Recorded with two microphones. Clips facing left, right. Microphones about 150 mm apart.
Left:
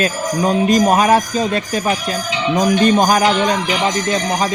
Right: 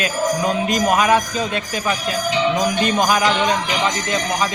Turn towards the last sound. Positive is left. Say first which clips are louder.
# left 5 dB
turn(degrees=40)  # may be behind; listen again after turning